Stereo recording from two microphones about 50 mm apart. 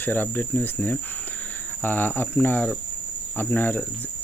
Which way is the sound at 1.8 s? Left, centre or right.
Left.